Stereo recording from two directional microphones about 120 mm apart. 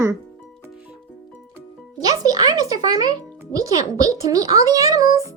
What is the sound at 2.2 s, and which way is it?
Speech, 35° right (ahead or behind).